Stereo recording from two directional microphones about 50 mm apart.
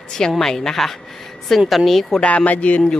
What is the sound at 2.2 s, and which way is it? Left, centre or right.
Speech, left.